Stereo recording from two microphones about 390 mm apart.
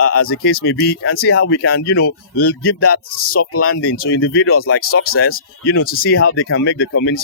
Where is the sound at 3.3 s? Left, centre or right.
Left.